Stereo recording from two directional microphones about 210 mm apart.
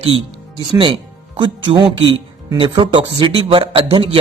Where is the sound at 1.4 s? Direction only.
20° right (ahead or behind).